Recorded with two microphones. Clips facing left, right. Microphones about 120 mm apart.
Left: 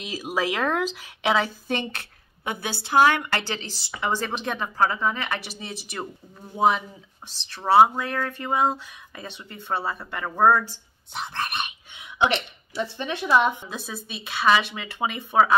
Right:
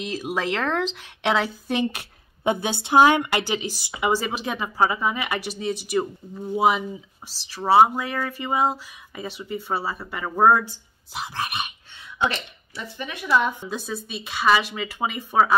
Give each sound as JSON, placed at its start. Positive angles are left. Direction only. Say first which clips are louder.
{"t": 0.0, "sound": "speech", "louder": "right 1 dB", "side_deg": 0}
{"t": 2.0, "sound": "a woman's voice", "louder": "right 1 dB", "side_deg": -20}
{"t": 11.9, "sound": "a sound", "louder": "left 3 dB", "side_deg": 15}
{"t": 12.8, "sound": "a woman's voice", "louder": "left 3 dB", "side_deg": 30}
{"t": 13.7, "sound": "speech", "louder": "right 4 dB", "side_deg": 0}